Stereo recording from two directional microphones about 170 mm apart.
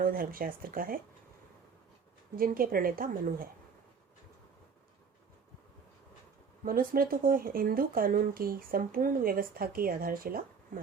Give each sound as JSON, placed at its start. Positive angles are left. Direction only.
{"t": 0.0, "sound": "speech", "side_deg": -55}
{"t": 2.3, "sound": "speech", "side_deg": -60}
{"t": 6.7, "sound": "speech", "side_deg": -60}